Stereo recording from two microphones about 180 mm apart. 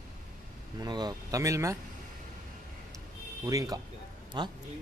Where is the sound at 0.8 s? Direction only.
25° right (ahead or behind).